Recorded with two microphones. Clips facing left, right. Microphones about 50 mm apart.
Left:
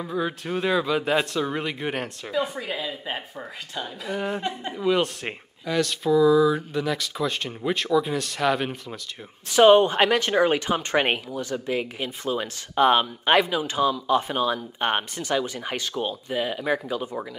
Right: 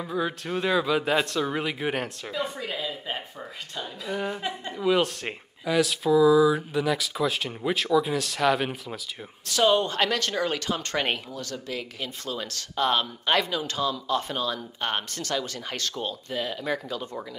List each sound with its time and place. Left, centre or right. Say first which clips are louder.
0.0 s speech: left 1 dB; centre
9.5 s speech: left 7 dB; left